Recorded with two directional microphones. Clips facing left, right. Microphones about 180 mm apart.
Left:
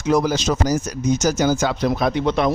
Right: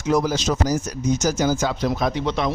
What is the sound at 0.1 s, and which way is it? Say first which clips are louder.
A man's voice: left 2 dB; 70° left (ahead or behind).